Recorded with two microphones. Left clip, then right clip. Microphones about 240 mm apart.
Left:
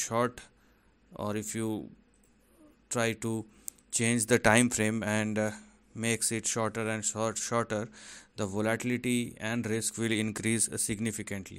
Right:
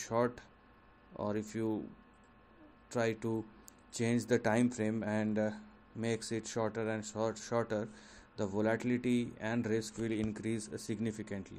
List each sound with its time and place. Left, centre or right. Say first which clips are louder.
0.0 s speech: left 3 dB; left
2.9 s speech: left 3 dB; left